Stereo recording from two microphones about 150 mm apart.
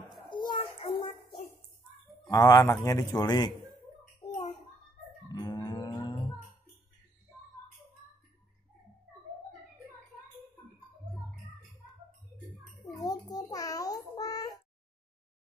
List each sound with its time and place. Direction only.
0.3 s child singing: 30° left (ahead or behind)
2.2 s a man's voice: 25° left (ahead or behind)
5.3 s cattle: 25° left (ahead or behind)
12.8 s child singing: 25° left (ahead or behind)